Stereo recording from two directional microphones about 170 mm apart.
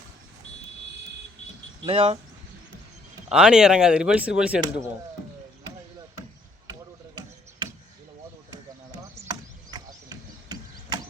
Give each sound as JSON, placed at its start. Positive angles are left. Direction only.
{"t": 1.9, "sound": "speech", "side_deg": -35}
{"t": 3.2, "sound": "speech", "side_deg": -5}
{"t": 8.4, "sound": "chop", "side_deg": -25}